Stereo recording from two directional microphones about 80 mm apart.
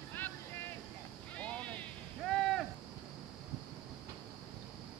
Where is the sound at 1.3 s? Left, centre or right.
Centre.